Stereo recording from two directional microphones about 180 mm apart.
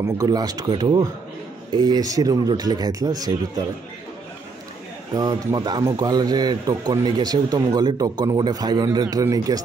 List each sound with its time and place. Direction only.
0.0 s speech: 20° right (ahead or behind)
5.1 s speech: 20° right (ahead or behind)